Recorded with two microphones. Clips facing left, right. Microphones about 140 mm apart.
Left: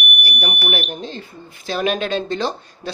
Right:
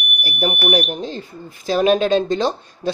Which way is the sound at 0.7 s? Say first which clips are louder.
Right 5 dB; 35° right (ahead or behind).